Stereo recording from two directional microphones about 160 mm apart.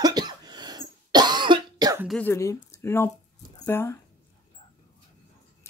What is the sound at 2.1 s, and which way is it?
Speech, 10° left (ahead or behind).